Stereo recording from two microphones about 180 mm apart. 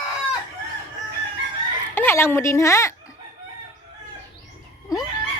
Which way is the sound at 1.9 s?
10° left (ahead or behind).